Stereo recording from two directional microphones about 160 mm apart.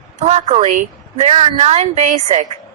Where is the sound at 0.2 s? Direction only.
45° right (ahead or behind).